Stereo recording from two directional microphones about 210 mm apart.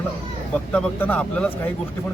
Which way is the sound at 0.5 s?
5° left (ahead or behind).